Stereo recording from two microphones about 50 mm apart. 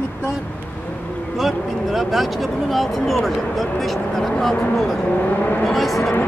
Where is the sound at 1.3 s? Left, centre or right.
Centre.